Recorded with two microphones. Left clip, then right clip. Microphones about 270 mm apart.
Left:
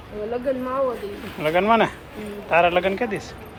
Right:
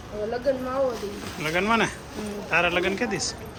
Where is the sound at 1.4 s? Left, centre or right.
Centre.